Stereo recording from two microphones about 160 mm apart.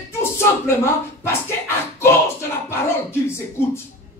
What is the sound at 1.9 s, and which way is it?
Speech, 15° left (ahead or behind).